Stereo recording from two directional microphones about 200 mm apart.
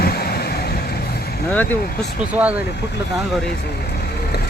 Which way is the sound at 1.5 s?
10° left (ahead or behind).